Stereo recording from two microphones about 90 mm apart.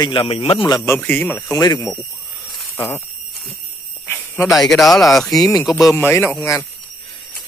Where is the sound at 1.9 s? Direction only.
Centre (ahead or behind).